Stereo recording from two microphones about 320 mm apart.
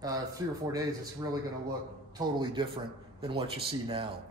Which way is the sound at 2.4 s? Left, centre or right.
Centre.